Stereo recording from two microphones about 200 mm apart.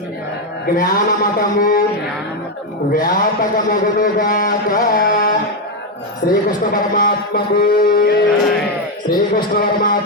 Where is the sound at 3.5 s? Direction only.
45° left (ahead or behind).